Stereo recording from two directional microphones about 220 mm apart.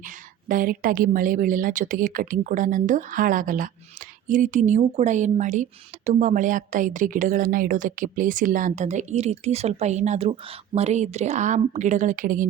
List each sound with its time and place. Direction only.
0.4 s a woman's voice: 40° right (ahead or behind)